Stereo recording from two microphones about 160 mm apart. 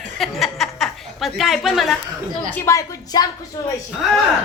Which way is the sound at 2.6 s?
20° left (ahead or behind).